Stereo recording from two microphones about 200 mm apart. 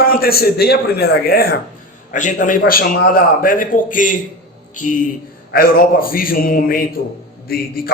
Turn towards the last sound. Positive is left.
turn(degrees=50)  # may be behind; listen again after turning